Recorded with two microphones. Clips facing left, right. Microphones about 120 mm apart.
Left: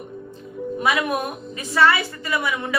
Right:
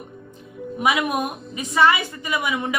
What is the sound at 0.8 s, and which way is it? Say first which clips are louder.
A woman's voice: right 1 dB; 15° right (ahead or behind).